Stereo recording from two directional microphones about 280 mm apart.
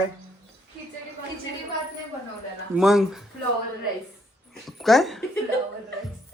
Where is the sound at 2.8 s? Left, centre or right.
Centre.